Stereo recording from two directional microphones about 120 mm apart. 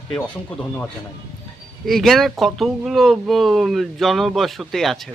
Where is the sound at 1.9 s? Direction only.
Centre (ahead or behind).